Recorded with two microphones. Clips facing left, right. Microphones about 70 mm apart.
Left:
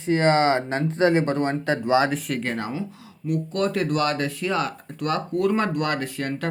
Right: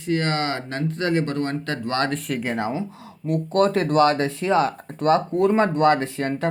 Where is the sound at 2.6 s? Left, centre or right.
Right.